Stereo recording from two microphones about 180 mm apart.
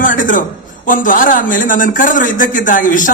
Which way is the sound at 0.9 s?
50° left (ahead or behind).